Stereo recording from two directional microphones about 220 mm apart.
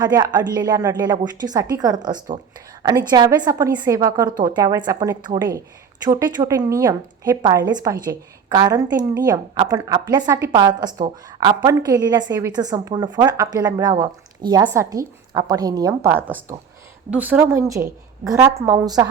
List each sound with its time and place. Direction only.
0.0 s a woman's voice: 15° right (ahead or behind)